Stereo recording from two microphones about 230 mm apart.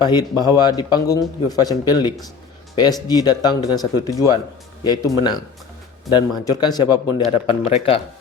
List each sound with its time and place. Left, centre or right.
0.0 s a man's voice: centre